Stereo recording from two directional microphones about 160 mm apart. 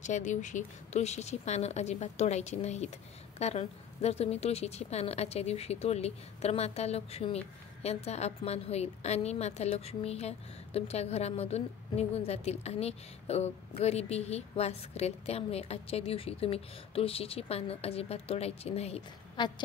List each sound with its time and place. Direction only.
0.0 s a woman's voice: 50° left (ahead or behind)
19.4 s a woman's voice: 30° left (ahead or behind)